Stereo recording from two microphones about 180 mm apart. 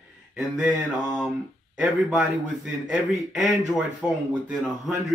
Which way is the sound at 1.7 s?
5° right (ahead or behind).